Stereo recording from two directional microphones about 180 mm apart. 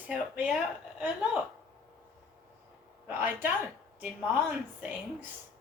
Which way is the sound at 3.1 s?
10° right (ahead or behind).